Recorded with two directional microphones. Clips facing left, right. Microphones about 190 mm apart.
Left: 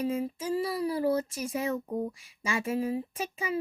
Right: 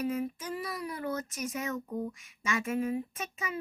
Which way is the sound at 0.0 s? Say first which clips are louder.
Left 2 dB; 30° left (ahead or behind).